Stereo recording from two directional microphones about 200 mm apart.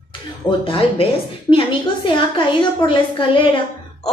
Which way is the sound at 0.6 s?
30° left (ahead or behind).